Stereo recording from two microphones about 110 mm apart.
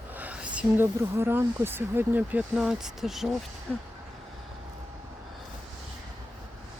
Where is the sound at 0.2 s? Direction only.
15° right (ahead or behind).